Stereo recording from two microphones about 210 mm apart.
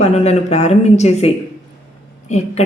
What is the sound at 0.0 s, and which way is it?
Speech, 30° left (ahead or behind).